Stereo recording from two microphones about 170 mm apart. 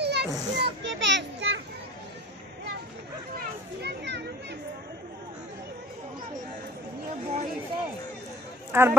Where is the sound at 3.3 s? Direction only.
75° right (ahead or behind).